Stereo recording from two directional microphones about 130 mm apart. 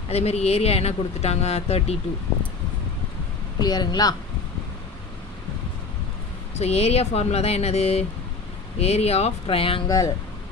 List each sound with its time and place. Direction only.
0.1 s speech: 55° left (ahead or behind)
3.6 s a woman's voice: 30° left (ahead or behind)
6.6 s speech: 55° left (ahead or behind)
9.8 s speech: 25° left (ahead or behind)